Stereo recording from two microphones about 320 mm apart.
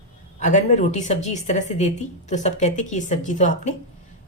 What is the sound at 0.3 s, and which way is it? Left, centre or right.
Speech, left.